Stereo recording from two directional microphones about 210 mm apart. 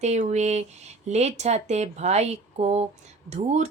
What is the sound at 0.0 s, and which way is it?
Speech, 35° right (ahead or behind).